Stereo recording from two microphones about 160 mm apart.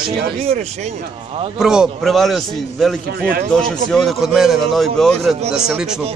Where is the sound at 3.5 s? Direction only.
5° left (ahead or behind).